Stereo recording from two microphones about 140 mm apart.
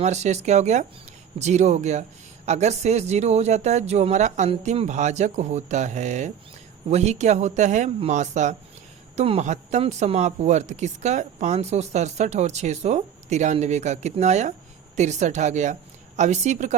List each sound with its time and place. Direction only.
0.0 s a woman's voice: 55° right (ahead or behind)